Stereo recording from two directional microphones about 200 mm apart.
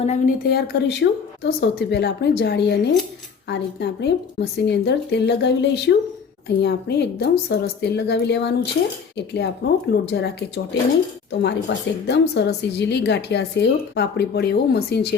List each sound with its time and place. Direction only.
0.0 s speech: 35° left (ahead or behind)
0.4 s a woman's voice: 55° left (ahead or behind)